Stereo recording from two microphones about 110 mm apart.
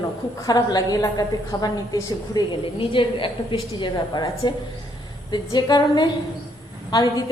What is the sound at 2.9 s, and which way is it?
A woman's voice, 50° left (ahead or behind).